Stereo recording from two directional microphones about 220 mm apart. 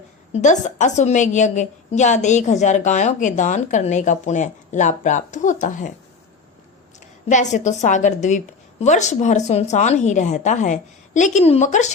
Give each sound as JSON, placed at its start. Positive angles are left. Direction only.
{"t": 0.3, "sound": "a woman's voice", "side_deg": 35}
{"t": 7.3, "sound": "a woman's voice", "side_deg": 35}